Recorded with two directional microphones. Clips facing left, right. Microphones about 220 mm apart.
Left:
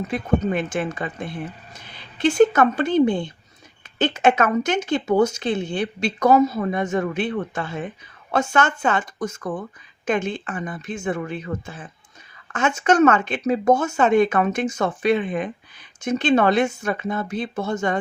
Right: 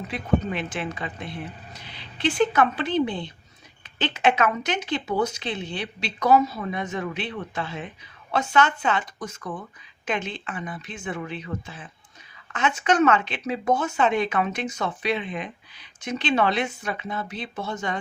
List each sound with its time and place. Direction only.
0.1 s speech: 50° left (ahead or behind)